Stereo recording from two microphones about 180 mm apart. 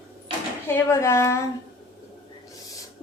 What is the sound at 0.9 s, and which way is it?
Speech, 15° left (ahead or behind).